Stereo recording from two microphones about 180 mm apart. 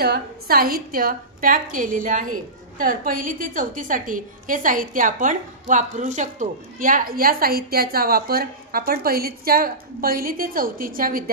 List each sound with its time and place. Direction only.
0.0 s a woman's voice: 60° right (ahead or behind)